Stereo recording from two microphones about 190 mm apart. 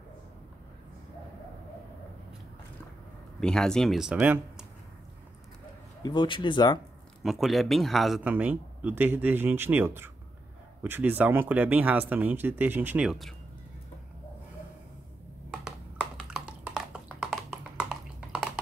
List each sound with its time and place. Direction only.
3.3 s speech: 5° left (ahead or behind)
6.0 s a man's voice: 25° left (ahead or behind)
7.2 s speech: centre (ahead or behind)
15.6 s a sound: 5° right (ahead or behind)